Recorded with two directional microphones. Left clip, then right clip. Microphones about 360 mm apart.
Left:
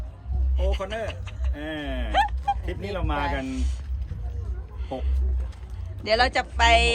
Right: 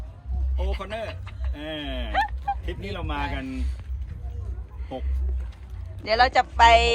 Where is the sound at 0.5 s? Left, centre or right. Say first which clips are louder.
Left 3 dB; centre.